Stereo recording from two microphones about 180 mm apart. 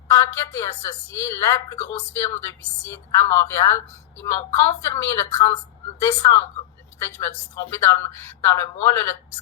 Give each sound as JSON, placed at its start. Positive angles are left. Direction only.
{"t": 0.1, "sound": "a woman's voice", "side_deg": 15}